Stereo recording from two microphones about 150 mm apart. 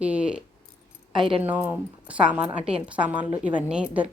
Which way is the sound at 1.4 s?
10° right (ahead or behind).